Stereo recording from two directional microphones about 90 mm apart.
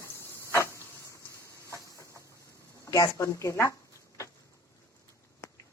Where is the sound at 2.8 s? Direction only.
40° left (ahead or behind).